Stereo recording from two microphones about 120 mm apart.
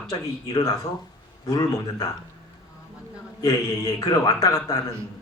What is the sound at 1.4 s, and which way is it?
Speech, 30° left (ahead or behind).